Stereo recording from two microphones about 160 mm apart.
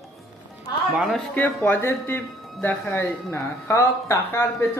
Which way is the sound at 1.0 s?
Centre (ahead or behind).